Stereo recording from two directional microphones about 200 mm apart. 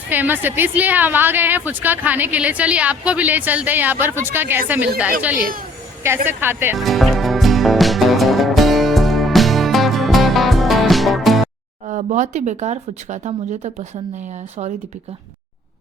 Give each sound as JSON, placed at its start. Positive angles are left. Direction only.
{"t": 0.1, "sound": "a woman's voice", "side_deg": -10}
{"t": 6.7, "sound": "music", "side_deg": 0}
{"t": 11.9, "sound": "speech", "side_deg": -35}